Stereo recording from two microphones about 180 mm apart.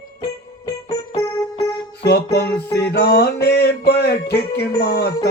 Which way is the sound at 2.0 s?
65° left (ahead or behind).